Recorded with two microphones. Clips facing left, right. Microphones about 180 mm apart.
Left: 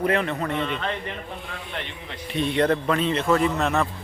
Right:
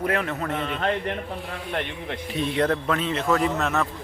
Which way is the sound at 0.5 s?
45° right (ahead or behind).